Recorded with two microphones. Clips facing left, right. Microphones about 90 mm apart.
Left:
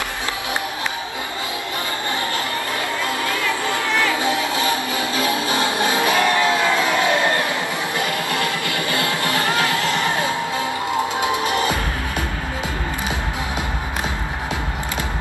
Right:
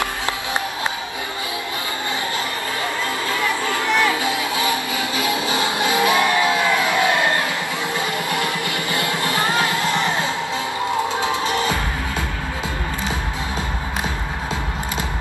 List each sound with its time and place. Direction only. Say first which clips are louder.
3.8 s music: right 4 dB; 20° right (ahead or behind)
4.2 s music: left 2 dB; 25° left (ahead or behind)
4.6 s music: left 1 dB; 20° right (ahead or behind)
6.9 s crowd: even; 20° right (ahead or behind)
8.0 s music: left 1 dB; 25° right (ahead or behind)